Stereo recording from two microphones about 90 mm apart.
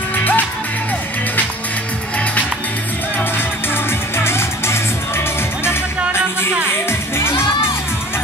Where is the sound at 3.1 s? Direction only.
25° left (ahead or behind).